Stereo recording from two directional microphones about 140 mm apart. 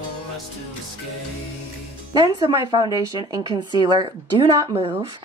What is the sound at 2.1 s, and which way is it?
A woman's voice, 30° right (ahead or behind).